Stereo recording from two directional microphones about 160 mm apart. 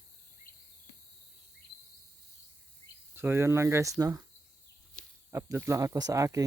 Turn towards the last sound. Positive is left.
turn(degrees=-20)  # may be behind; listen again after turning